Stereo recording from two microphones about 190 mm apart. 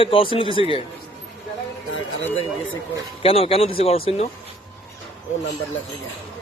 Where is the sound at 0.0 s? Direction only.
30° left (ahead or behind).